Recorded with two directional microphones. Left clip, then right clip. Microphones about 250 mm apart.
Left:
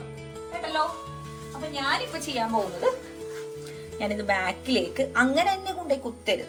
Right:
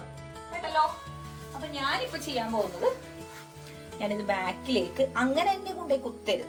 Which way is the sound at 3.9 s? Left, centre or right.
Centre.